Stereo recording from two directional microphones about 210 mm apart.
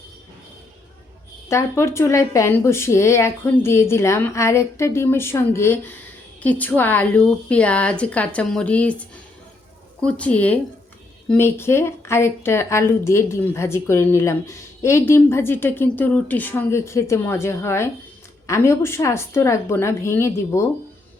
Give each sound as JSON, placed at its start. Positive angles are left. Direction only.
{"t": 1.5, "sound": "a woman's voice", "side_deg": 15}